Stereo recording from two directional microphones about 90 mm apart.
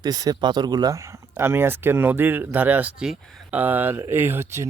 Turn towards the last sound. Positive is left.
turn(degrees=-30)  # may be behind; listen again after turning